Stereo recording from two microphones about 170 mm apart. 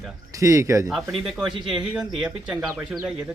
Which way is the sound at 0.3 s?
20° right (ahead or behind).